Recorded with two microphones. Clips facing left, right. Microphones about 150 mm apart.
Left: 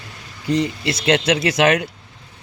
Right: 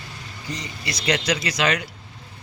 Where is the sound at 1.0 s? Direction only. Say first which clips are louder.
Left 6 dB; 75° left (ahead or behind).